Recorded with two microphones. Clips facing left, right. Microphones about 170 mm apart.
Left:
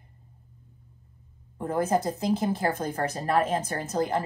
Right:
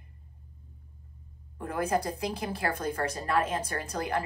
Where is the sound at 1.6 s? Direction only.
25° left (ahead or behind).